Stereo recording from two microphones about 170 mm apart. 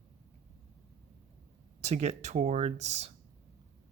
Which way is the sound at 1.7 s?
40° right (ahead or behind).